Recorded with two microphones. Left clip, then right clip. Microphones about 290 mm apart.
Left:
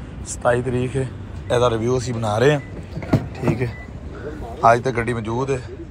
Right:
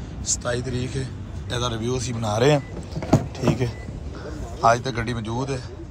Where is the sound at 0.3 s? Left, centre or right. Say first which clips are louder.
Left 7 dB; centre.